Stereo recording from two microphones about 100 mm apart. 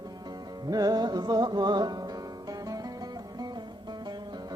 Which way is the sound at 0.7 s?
40° right (ahead or behind).